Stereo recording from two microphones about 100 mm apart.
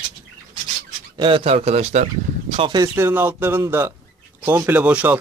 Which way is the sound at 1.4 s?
90° right.